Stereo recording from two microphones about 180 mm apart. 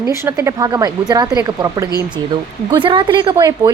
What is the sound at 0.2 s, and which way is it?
A woman's voice, 15° right (ahead or behind).